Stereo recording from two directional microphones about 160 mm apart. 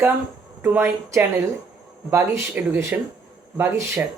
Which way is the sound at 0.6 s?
15° right (ahead or behind).